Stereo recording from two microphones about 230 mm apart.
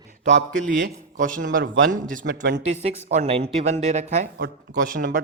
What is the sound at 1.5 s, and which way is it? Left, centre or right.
Speech, right.